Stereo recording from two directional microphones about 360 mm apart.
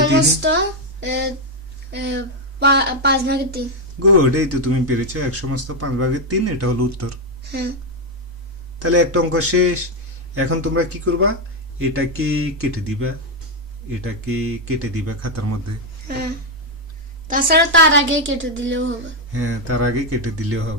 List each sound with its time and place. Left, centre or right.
0.1 s music: right
1.0 s a woman's voice: right
4.2 s speech: right
8.8 s speech: right
16.1 s a woman's voice: right
17.2 s speech: right